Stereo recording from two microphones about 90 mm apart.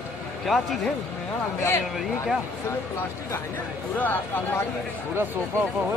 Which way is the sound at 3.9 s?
20° left (ahead or behind).